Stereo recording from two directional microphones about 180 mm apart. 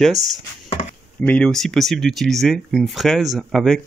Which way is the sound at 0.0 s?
Centre (ahead or behind).